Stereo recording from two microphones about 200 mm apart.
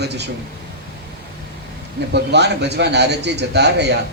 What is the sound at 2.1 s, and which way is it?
A man's voice, 55° right (ahead or behind).